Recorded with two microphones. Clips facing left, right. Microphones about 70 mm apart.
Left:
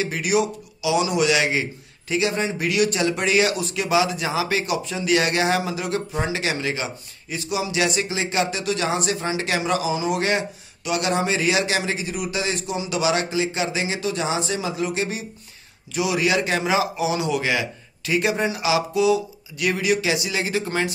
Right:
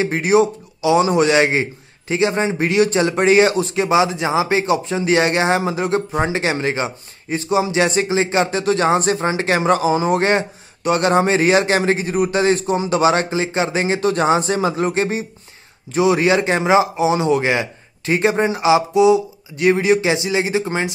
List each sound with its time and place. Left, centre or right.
0.0 s a man's voice: right